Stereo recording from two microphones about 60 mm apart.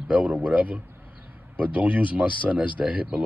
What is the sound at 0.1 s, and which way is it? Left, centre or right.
Speech, right.